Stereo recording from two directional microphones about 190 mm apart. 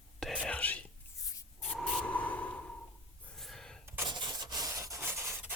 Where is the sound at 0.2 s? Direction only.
Centre (ahead or behind).